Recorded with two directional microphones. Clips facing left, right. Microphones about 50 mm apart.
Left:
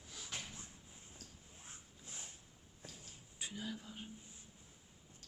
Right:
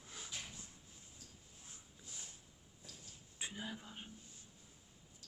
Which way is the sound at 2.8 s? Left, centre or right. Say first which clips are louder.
Left 3 dB; left.